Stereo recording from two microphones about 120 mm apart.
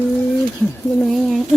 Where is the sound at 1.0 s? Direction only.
Centre (ahead or behind).